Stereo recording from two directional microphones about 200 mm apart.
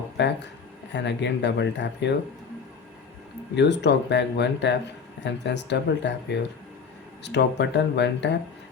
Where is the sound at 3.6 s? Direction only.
60° left (ahead or behind).